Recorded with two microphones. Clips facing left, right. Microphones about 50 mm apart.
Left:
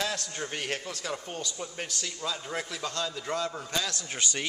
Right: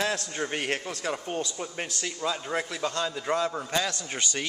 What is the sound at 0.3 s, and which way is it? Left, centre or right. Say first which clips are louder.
A man's voice: right 4 dB; right.